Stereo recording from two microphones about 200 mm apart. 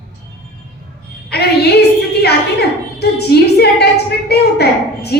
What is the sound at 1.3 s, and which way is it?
Music, 55° left (ahead or behind).